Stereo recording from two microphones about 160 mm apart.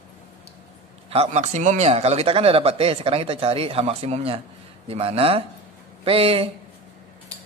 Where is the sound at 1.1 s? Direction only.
45° right (ahead or behind).